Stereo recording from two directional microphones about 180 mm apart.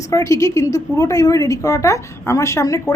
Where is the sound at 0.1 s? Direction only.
15° left (ahead or behind).